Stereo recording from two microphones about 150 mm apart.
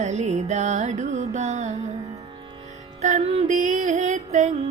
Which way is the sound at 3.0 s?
50° right (ahead or behind).